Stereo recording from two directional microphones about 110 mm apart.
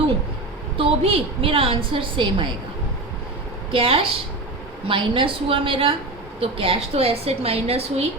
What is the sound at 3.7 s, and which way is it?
A woman's voice, 55° right (ahead or behind).